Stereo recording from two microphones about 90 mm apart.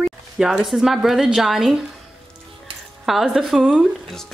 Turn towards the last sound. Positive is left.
turn(degrees=-5)  # may be behind; listen again after turning